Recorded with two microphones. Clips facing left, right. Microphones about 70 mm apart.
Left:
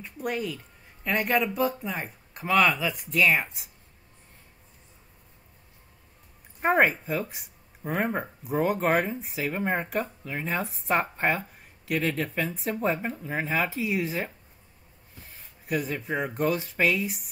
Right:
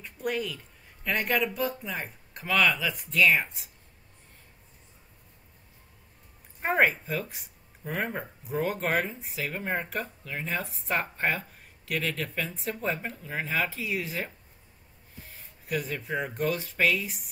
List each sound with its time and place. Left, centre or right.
0.0 s speech: centre
6.6 s speech: centre
8.5 s speech: centre
15.7 s speech: centre